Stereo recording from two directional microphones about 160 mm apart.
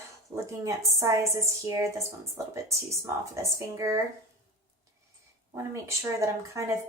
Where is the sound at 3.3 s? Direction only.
20° right (ahead or behind).